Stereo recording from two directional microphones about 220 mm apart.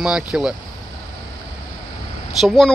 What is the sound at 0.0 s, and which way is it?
Speech, 5° right (ahead or behind).